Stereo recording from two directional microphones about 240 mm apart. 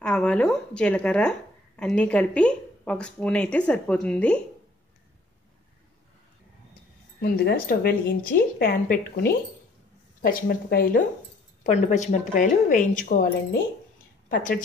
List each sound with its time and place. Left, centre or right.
0.0 s speech: centre
7.2 s speech: left